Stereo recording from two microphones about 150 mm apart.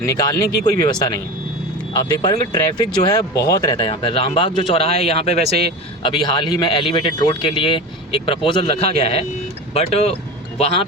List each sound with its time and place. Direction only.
0.0 s speech: 25° left (ahead or behind); by 10.2 s 40° left (ahead or behind)